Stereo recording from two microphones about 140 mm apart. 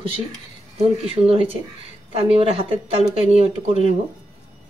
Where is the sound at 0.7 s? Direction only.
45° right (ahead or behind).